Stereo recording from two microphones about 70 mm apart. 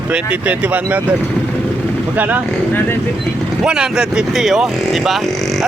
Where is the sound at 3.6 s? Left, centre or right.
Centre.